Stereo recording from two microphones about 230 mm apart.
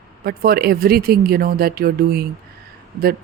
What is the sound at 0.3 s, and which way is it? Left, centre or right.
Speech, right.